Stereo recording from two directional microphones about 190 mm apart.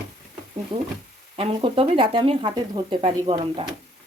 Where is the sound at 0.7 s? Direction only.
25° right (ahead or behind).